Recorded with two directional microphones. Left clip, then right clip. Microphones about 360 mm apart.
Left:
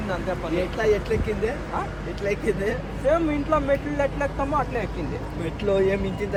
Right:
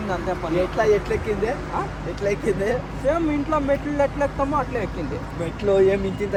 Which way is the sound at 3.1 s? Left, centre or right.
Centre.